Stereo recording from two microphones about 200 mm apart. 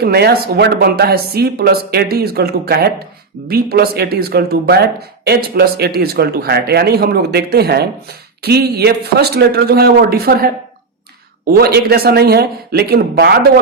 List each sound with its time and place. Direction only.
0.0 s speech: 55° right (ahead or behind)